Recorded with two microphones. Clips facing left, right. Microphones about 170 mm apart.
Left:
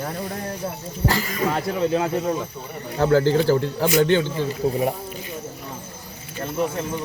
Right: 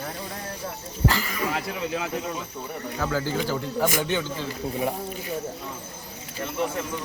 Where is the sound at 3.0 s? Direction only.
65° left (ahead or behind).